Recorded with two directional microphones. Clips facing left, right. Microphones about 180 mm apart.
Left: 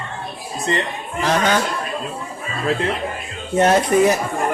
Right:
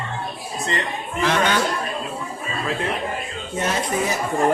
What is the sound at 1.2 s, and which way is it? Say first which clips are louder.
Speech: left 2 dB; 40° left (ahead or behind).